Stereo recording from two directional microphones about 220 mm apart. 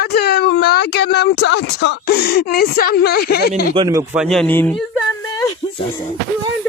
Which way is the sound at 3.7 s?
15° right (ahead or behind).